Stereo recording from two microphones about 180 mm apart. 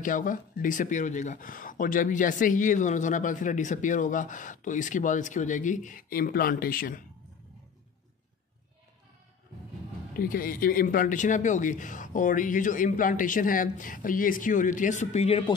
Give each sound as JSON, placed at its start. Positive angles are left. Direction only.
{"t": 0.0, "sound": "speech", "side_deg": 45}
{"t": 10.1, "sound": "speech", "side_deg": 50}